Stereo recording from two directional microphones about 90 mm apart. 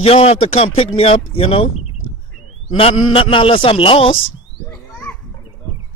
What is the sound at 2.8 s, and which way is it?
A man's voice, 90° left.